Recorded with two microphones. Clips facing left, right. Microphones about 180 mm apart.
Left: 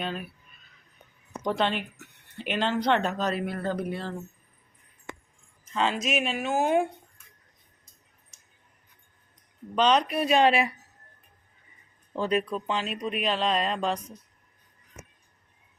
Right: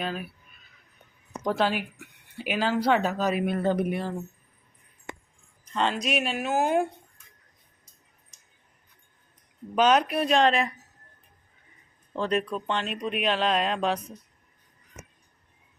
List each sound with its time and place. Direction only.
0.0 s speech: 5° right (ahead or behind)
1.4 s speech: centre (ahead or behind)
3.4 s speech: 20° right (ahead or behind)
5.7 s speech: centre (ahead or behind)
9.7 s speech: 5° right (ahead or behind)
12.1 s speech: 5° left (ahead or behind)